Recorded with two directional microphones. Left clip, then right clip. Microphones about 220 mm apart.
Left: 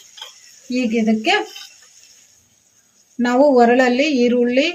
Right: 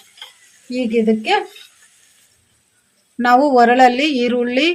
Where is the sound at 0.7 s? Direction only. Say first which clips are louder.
Right 3 dB; 35° right (ahead or behind).